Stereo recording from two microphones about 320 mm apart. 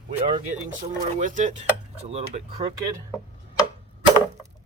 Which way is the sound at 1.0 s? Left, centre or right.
Right.